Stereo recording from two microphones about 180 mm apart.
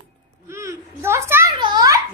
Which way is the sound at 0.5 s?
15° right (ahead or behind).